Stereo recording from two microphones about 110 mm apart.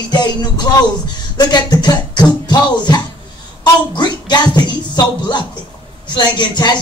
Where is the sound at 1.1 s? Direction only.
40° left (ahead or behind).